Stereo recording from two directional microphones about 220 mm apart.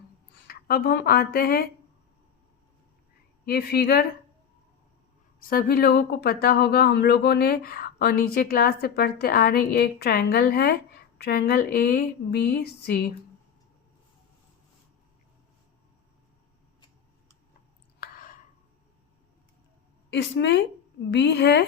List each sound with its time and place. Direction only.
0.4 s speech: 45° left (ahead or behind)
3.4 s speech: 45° left (ahead or behind)
5.5 s speech: 40° left (ahead or behind)
18.0 s a sound: 40° left (ahead or behind)
20.1 s speech: 55° left (ahead or behind)